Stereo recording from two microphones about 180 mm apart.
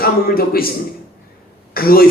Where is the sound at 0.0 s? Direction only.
55° left (ahead or behind).